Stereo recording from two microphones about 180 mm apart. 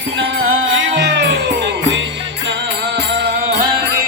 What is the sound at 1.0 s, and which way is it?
Music, 75° right (ahead or behind).